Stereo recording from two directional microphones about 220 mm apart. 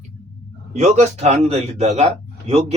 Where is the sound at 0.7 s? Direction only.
30° right (ahead or behind).